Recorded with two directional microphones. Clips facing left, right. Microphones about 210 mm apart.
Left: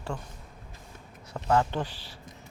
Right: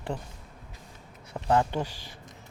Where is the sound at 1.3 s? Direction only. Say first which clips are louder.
Even; 15° right (ahead or behind).